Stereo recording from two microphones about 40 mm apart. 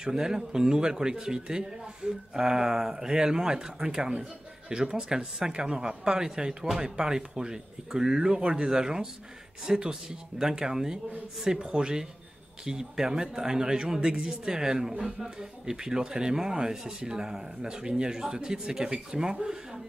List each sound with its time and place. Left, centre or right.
0.0 s speech: centre